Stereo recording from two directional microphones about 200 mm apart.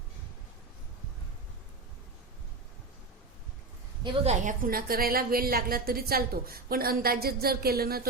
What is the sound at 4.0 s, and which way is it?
A woman's voice, 35° right (ahead or behind).